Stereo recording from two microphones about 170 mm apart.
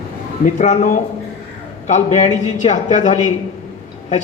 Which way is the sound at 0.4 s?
45° left (ahead or behind).